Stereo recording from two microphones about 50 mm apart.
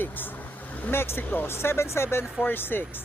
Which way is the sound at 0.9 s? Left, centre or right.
Left.